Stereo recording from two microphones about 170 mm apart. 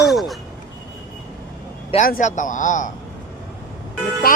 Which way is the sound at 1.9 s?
50° left (ahead or behind).